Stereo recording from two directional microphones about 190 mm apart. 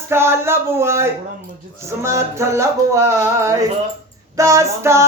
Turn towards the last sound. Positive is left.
turn(degrees=-15)  # may be behind; listen again after turning